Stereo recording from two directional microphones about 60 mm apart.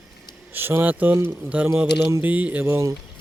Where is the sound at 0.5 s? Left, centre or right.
Right.